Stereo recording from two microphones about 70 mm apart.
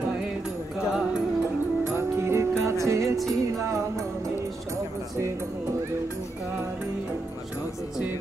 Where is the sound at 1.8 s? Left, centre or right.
Right.